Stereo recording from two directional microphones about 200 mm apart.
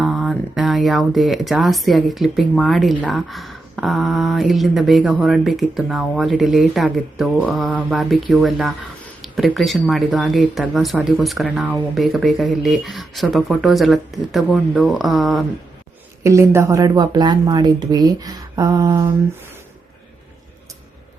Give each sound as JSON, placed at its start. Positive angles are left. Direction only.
{"t": 0.0, "sound": "speech", "side_deg": 0}
{"t": 16.2, "sound": "speech", "side_deg": -15}